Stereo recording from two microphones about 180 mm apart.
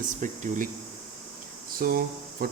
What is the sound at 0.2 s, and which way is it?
Speech, 45° right (ahead or behind).